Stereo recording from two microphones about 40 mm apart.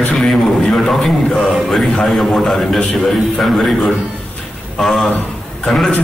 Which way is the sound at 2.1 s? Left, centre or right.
Centre.